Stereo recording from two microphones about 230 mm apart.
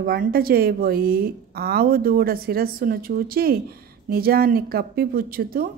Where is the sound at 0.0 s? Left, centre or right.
Right.